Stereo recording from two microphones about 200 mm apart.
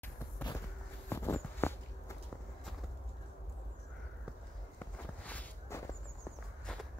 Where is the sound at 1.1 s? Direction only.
10° left (ahead or behind).